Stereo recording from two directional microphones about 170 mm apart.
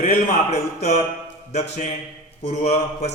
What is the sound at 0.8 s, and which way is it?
Speech, 40° left (ahead or behind).